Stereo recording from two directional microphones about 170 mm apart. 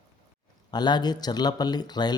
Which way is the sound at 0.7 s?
25° left (ahead or behind).